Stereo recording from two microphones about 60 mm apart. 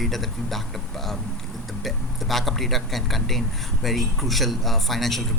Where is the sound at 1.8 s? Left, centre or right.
Centre.